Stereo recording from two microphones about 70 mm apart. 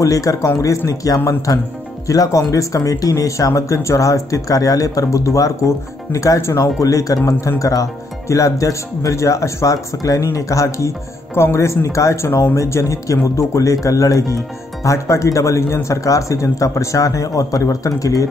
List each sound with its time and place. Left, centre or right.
0.0 s speech: left